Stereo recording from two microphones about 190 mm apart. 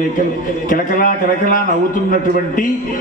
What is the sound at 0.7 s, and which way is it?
Speech, 45° left (ahead or behind).